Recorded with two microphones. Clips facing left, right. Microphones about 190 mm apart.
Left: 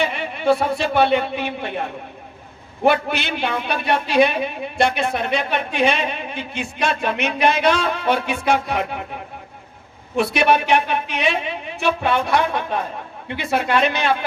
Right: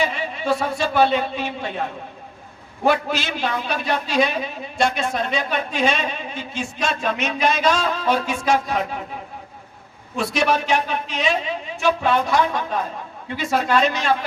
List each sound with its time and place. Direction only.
0.0 s speech: 60° left (ahead or behind)
2.8 s a man's voice: 60° left (ahead or behind)
10.2 s a man's voice: 60° left (ahead or behind)